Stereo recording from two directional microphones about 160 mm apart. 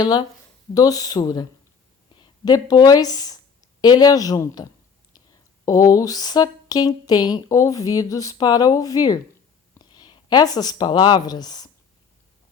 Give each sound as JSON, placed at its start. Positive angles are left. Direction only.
{"t": 0.0, "sound": "speech", "side_deg": 25}